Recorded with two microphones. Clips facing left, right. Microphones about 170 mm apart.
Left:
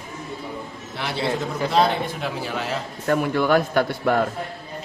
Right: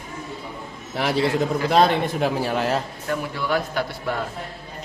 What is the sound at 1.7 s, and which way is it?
Speech, 45° right (ahead or behind).